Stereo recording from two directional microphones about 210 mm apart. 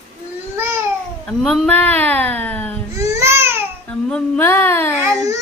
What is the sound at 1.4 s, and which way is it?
Speech, 5° left (ahead or behind).